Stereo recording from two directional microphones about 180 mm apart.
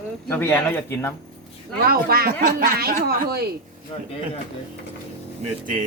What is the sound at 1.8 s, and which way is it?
Speech, 55° right (ahead or behind).